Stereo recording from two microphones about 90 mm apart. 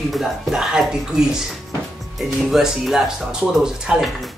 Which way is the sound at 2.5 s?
5° right (ahead or behind).